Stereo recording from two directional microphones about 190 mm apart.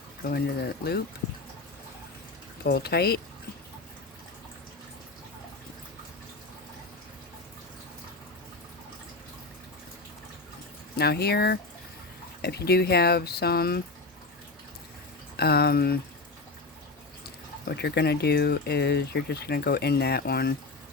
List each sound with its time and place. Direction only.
0.2 s speech: 55° left (ahead or behind)
2.6 s speech: 60° left (ahead or behind)
10.9 s speech: 55° left (ahead or behind)
15.4 s speech: 55° left (ahead or behind)
17.7 s speech: 60° left (ahead or behind)